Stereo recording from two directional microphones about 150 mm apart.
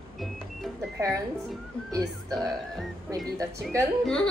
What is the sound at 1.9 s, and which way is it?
Speech, 20° right (ahead or behind).